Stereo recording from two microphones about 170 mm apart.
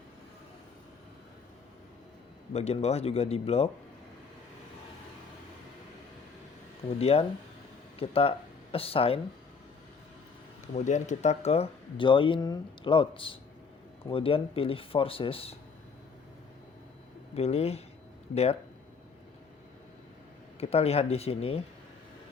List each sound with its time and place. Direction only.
2.5 s speech: 40° left (ahead or behind)
7.0 s speech: 35° left (ahead or behind)
10.8 s speech: 45° left (ahead or behind)
17.3 s speech: 35° left (ahead or behind)
20.6 s speech: 35° left (ahead or behind)